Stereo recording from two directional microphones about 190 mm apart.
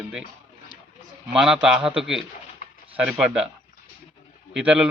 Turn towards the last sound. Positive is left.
turn(degrees=-5)  # may be behind; listen again after turning